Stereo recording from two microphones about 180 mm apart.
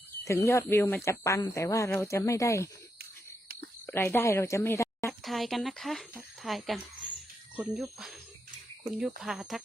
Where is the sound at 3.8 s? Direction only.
15° left (ahead or behind).